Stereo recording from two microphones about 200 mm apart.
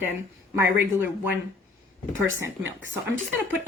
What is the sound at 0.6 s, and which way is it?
Speech, 10° right (ahead or behind).